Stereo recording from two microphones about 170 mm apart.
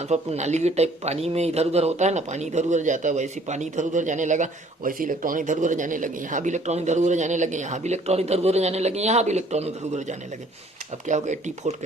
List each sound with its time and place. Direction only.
0.0 s speech: 40° right (ahead or behind)